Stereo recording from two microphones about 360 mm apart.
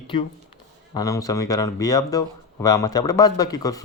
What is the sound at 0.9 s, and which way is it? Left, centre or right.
Speech, centre.